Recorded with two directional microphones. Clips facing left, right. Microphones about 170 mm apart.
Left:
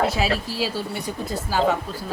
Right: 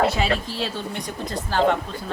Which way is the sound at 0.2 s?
5° left (ahead or behind).